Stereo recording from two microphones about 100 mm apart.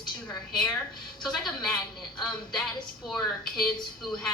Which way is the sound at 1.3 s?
Centre (ahead or behind).